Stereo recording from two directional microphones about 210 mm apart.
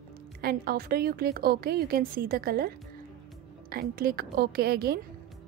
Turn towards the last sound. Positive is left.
turn(degrees=-50)  # may be behind; listen again after turning